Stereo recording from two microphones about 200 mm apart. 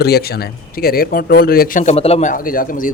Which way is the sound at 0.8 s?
50° left (ahead or behind).